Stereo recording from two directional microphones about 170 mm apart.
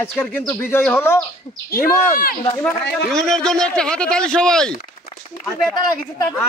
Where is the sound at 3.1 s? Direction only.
5° left (ahead or behind).